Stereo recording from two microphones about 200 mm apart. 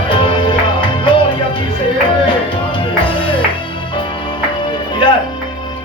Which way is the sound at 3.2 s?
25° left (ahead or behind).